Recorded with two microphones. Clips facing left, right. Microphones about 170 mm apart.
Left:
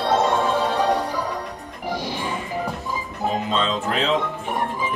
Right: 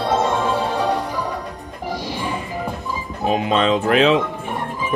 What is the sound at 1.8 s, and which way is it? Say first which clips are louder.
Music: even; 10° right (ahead or behind).